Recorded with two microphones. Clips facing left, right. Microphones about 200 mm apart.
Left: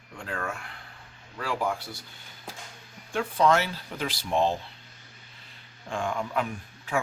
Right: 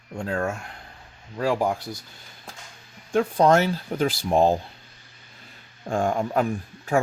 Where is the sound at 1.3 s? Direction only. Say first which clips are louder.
Right 6 dB; 40° right (ahead or behind).